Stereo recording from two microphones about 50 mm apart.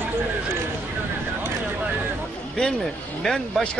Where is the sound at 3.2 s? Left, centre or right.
Centre.